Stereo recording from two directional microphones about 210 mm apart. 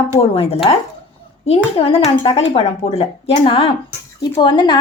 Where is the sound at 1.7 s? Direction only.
25° left (ahead or behind).